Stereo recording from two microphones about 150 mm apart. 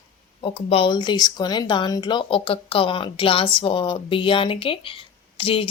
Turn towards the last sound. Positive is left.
turn(degrees=35)  # may be behind; listen again after turning